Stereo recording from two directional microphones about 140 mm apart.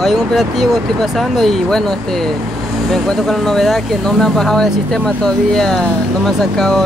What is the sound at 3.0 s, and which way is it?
Speech, centre (ahead or behind).